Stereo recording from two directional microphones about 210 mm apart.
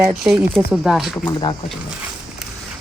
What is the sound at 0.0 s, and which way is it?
Speech, 5° right (ahead or behind).